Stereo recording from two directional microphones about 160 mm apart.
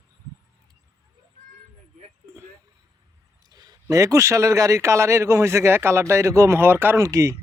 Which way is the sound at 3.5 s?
25° right (ahead or behind).